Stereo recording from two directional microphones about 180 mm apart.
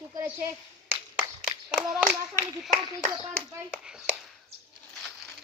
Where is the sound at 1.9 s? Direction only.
5° right (ahead or behind).